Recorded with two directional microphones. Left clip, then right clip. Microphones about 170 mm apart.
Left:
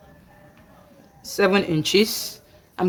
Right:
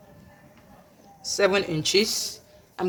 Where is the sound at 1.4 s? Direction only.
50° left (ahead or behind).